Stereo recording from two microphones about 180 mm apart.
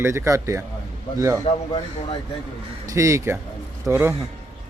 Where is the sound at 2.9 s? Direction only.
15° right (ahead or behind).